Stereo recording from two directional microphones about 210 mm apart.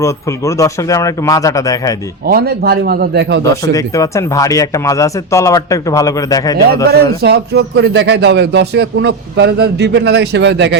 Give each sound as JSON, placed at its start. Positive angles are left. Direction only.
{"t": 0.0, "sound": "speech", "side_deg": 15}
{"t": 2.2, "sound": "a man's voice", "side_deg": -45}
{"t": 3.4, "sound": "speech", "side_deg": 15}
{"t": 6.8, "sound": "a man's voice", "side_deg": -50}